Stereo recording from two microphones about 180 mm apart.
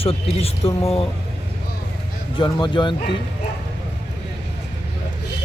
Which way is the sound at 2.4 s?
25° left (ahead or behind).